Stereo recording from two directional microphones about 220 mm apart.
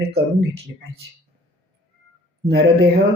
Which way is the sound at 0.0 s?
45° right (ahead or behind).